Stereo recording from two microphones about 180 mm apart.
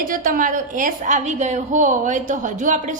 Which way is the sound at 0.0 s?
50° right (ahead or behind).